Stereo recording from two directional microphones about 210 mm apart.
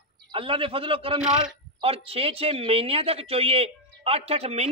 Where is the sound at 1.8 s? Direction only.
25° right (ahead or behind).